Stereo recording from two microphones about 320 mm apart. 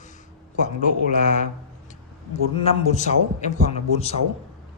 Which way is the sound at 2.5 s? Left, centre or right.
Centre.